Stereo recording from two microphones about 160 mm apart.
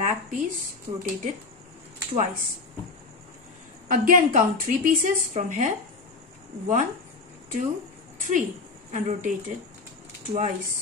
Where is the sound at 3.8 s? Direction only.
60° right (ahead or behind).